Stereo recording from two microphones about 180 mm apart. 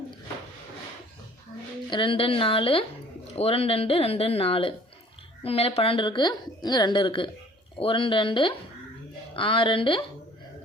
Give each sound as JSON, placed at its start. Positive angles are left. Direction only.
{"t": 1.9, "sound": "a woman's voice", "side_deg": 30}